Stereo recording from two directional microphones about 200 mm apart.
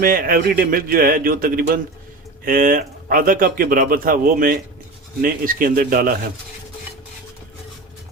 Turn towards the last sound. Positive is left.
turn(degrees=-45)  # may be behind; listen again after turning